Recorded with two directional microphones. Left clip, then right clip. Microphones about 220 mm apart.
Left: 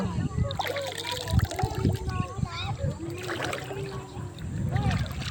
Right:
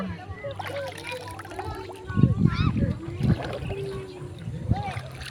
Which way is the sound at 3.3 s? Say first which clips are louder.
Left 1 dB; 45° left (ahead or behind).